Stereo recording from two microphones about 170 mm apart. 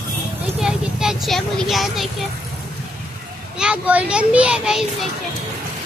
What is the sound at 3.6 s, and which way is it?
A child's voice, 5° right (ahead or behind).